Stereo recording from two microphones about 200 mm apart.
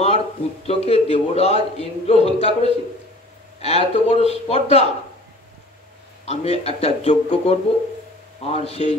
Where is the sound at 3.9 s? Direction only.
30° left (ahead or behind).